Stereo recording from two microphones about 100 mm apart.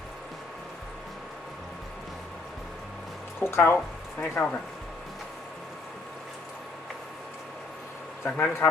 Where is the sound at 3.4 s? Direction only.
25° left (ahead or behind).